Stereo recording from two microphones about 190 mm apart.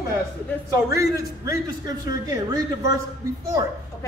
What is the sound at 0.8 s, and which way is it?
A man's voice, 15° right (ahead or behind).